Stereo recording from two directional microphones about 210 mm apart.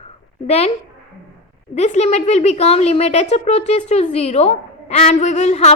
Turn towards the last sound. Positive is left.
turn(degrees=30)  # may be behind; listen again after turning